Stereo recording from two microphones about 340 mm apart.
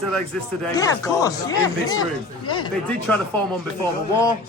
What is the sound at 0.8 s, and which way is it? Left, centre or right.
Speech, centre.